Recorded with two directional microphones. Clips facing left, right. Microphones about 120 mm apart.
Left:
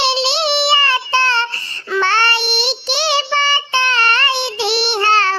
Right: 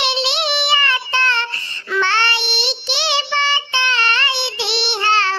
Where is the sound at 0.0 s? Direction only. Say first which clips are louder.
Left 4 dB; 30° left (ahead or behind).